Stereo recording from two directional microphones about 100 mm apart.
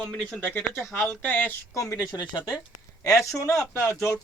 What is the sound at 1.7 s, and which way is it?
Speech, 35° left (ahead or behind).